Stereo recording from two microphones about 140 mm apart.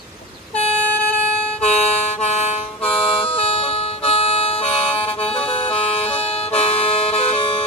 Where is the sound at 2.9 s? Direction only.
40° left (ahead or behind).